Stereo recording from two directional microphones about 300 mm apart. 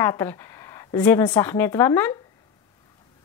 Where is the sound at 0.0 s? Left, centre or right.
Centre.